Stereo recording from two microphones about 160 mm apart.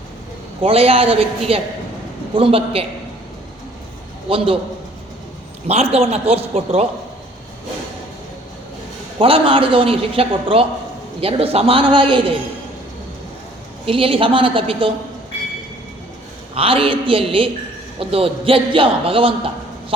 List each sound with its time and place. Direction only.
0.6 s a man's voice: 35° right (ahead or behind)
4.3 s a man's voice: 35° right (ahead or behind)
5.6 s a man's voice: 40° right (ahead or behind)
9.1 s a man's voice: 35° right (ahead or behind)
13.8 s a man's voice: 35° right (ahead or behind)
16.6 s a man's voice: 35° right (ahead or behind)